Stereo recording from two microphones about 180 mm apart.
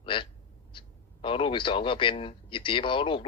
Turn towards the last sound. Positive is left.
turn(degrees=30)  # may be behind; listen again after turning